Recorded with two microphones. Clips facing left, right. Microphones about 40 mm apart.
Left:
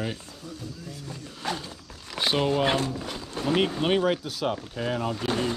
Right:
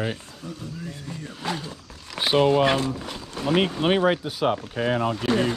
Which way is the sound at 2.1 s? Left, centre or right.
Centre.